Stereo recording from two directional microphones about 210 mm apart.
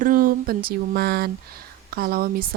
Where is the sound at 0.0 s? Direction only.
40° right (ahead or behind).